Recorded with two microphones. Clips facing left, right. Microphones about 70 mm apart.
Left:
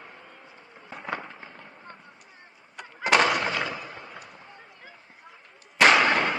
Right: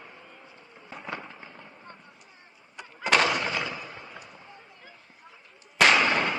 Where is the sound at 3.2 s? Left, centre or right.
Left.